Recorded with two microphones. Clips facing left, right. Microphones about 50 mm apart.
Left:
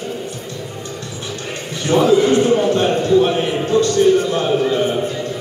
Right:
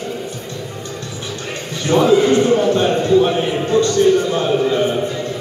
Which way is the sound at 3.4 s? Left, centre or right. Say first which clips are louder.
Even; centre.